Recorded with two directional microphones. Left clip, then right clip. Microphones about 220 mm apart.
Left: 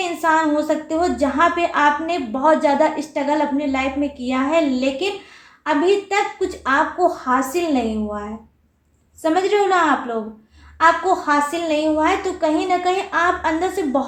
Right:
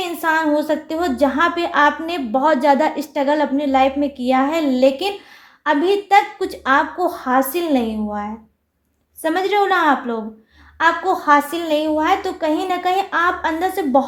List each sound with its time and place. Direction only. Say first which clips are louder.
0.0 s a woman's voice: left 1 dB; 40° right (ahead or behind)
9.2 s a woman's voice: even; 40° right (ahead or behind)